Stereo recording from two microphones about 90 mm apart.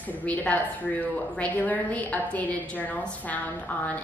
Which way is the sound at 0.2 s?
15° left (ahead or behind).